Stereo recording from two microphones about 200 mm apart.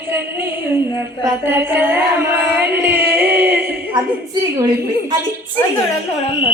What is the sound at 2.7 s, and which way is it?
Music, 10° right (ahead or behind).